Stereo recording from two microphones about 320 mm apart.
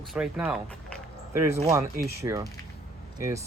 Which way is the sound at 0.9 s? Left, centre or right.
Centre.